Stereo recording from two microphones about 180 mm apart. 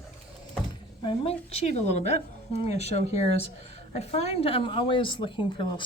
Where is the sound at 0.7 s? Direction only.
30° left (ahead or behind).